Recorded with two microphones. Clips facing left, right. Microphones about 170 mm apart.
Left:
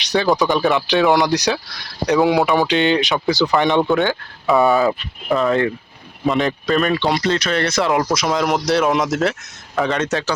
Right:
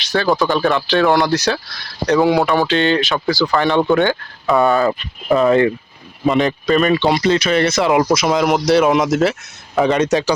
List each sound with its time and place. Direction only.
0.0 s a sound: 20° left (ahead or behind)
0.8 s speech: 15° left (ahead or behind)
2.1 s speech: centre (ahead or behind)
2.6 s speech: 20° left (ahead or behind)
3.8 s speech: centre (ahead or behind)
5.4 s speech: 20° right (ahead or behind)
6.2 s speech: centre (ahead or behind)
9.7 s speech: 15° right (ahead or behind)